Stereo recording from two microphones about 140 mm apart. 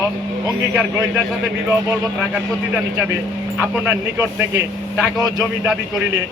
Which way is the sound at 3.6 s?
10° right (ahead or behind).